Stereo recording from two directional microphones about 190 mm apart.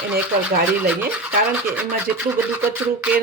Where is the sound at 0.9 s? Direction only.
5° right (ahead or behind).